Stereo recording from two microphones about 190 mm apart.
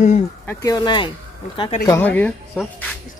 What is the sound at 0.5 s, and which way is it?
Speech, 15° left (ahead or behind).